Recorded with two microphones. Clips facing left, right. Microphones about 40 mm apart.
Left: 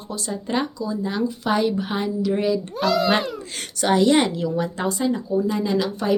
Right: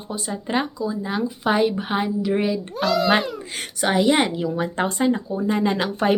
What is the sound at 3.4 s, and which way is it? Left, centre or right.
Speech, centre.